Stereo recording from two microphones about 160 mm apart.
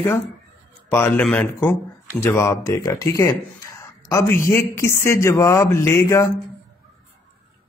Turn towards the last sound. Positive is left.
turn(degrees=15)  # may be behind; listen again after turning